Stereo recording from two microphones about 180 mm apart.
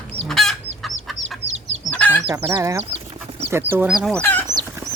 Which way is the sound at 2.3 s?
15° right (ahead or behind).